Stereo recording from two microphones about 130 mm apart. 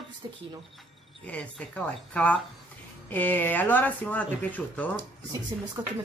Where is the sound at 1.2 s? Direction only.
10° left (ahead or behind).